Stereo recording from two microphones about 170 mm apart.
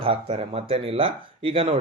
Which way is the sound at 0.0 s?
35° right (ahead or behind).